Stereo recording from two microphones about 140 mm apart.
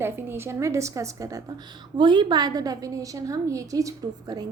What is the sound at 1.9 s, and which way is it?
A woman's voice, 35° right (ahead or behind).